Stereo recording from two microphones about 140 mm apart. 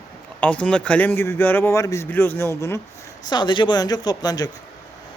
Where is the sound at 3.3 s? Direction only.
35° left (ahead or behind).